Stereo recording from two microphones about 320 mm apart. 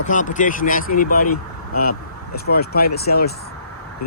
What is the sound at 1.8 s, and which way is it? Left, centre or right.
Speech, left.